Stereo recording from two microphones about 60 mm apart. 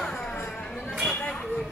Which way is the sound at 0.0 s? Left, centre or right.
Centre.